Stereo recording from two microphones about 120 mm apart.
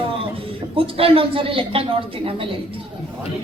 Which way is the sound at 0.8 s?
50° right (ahead or behind).